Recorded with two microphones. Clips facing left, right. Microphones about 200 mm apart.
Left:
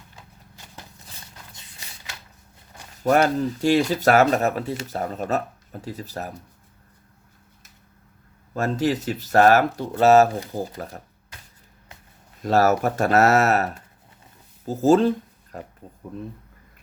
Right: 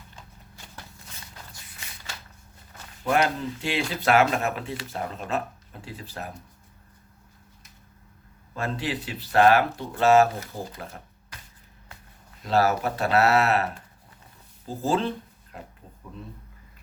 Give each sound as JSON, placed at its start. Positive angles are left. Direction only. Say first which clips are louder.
{"t": 3.0, "sound": "speech", "louder": "left 5 dB", "side_deg": 45}
{"t": 8.5, "sound": "speech", "louder": "left 7 dB", "side_deg": 45}
{"t": 12.4, "sound": "speech", "louder": "left 4 dB", "side_deg": 45}
{"t": 14.7, "sound": "speech", "louder": "left 9 dB", "side_deg": 45}